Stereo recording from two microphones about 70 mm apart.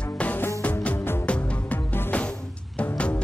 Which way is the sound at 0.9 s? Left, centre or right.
Left.